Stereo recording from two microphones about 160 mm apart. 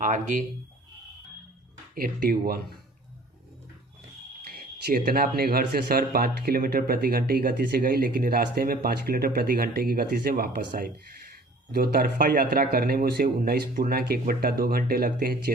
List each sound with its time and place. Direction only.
0.0 s speech: 50° right (ahead or behind)
2.0 s speech: 65° right (ahead or behind)
4.4 s speech: 70° right (ahead or behind)